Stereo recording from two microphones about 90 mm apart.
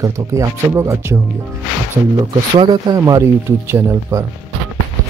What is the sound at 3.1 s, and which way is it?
Speech, 30° right (ahead or behind).